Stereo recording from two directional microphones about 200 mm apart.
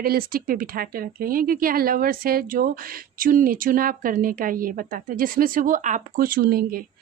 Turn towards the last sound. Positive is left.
turn(degrees=-45)  # may be behind; listen again after turning